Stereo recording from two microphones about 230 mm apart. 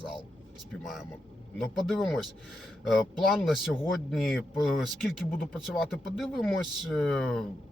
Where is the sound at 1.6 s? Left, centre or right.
Centre.